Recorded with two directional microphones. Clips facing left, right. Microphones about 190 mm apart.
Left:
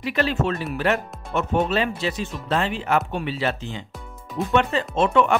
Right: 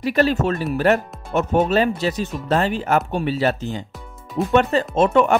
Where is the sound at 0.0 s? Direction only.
40° right (ahead or behind).